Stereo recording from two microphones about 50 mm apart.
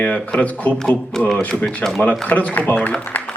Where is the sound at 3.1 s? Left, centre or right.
Left.